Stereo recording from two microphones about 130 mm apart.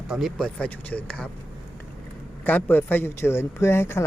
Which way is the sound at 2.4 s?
15° left (ahead or behind).